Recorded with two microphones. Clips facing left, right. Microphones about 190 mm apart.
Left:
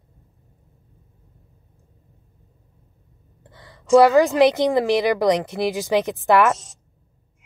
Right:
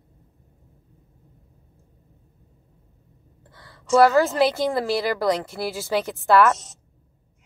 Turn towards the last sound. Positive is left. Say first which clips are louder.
# left 1 dB
turn(degrees=20)  # may be behind; listen again after turning